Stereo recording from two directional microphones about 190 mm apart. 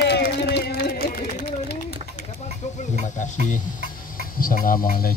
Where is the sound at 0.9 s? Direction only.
50° left (ahead or behind).